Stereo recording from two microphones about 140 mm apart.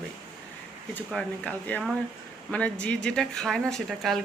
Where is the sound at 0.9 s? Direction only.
10° left (ahead or behind).